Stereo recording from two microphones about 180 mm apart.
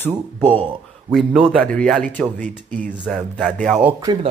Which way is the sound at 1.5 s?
5° left (ahead or behind).